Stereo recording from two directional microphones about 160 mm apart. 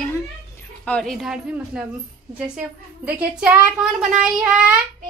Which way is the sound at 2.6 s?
10° right (ahead or behind).